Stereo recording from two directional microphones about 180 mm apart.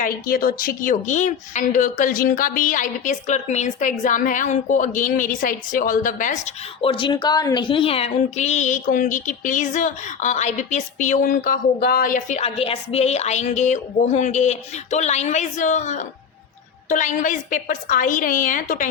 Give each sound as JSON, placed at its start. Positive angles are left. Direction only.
{"t": 0.0, "sound": "a woman's voice", "side_deg": 55}